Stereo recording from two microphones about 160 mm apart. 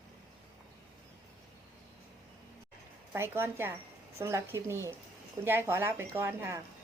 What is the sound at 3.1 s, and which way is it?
Speech, 15° right (ahead or behind).